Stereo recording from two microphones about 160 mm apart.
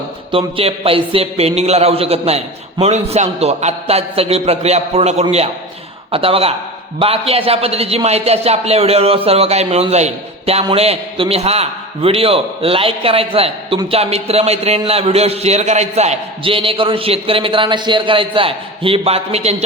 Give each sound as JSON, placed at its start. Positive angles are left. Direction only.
{"t": 0.3, "sound": "a man's voice", "side_deg": -35}